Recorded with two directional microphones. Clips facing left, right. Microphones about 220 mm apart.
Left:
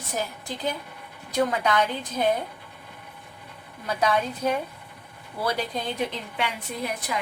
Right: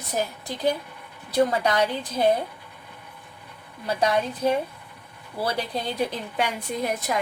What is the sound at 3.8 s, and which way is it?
A woman's voice, 30° right (ahead or behind).